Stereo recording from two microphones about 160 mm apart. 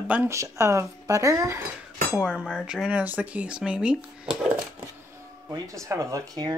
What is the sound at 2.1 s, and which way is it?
Speech, 5° right (ahead or behind).